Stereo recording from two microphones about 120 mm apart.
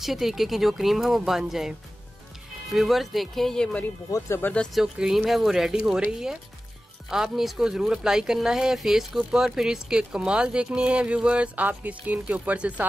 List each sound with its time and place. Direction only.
0.0 s speech: centre (ahead or behind)
4.1 s speech: 20° left (ahead or behind)
4.9 s speech: 5° right (ahead or behind)
7.1 s speech: 5° right (ahead or behind)